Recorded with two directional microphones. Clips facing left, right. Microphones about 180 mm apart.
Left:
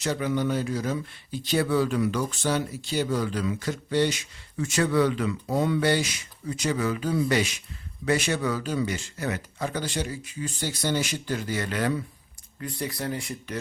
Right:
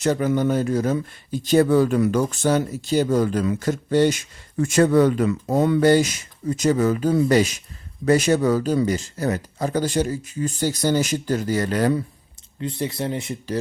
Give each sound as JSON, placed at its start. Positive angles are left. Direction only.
{"t": 0.0, "sound": "speech", "side_deg": -45}
{"t": 12.5, "sound": "speech", "side_deg": -25}